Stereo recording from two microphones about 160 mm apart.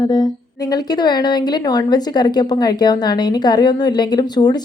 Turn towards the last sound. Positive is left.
turn(degrees=25)  # may be behind; listen again after turning